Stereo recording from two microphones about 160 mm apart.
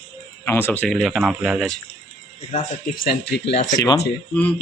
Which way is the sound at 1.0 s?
Centre (ahead or behind).